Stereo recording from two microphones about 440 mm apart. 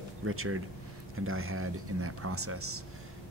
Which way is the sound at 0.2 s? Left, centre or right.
Right.